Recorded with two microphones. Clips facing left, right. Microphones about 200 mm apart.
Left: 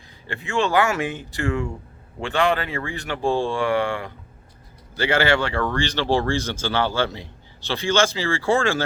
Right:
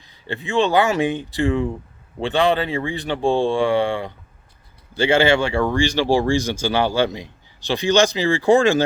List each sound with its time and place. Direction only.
0.3 s speech: 20° right (ahead or behind)
2.3 s speech: 30° right (ahead or behind)